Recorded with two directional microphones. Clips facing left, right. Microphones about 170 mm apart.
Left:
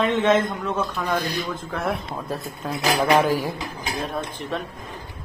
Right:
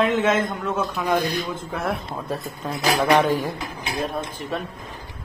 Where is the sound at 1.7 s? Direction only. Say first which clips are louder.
Left 1 dB; centre (ahead or behind).